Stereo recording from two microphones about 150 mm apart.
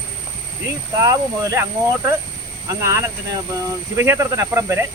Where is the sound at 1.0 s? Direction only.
20° right (ahead or behind).